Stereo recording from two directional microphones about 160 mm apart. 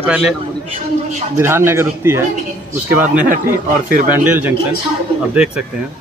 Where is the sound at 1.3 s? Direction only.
15° right (ahead or behind).